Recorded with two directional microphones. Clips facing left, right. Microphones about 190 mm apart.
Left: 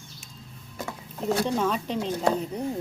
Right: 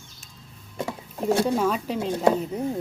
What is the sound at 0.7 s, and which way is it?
Vehicle, 25° right (ahead or behind).